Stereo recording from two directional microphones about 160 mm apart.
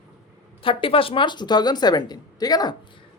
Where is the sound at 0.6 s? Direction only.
35° left (ahead or behind).